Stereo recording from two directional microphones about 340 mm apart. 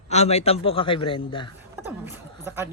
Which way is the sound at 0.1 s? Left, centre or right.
Centre.